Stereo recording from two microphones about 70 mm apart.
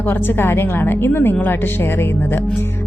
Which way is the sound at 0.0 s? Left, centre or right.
Left.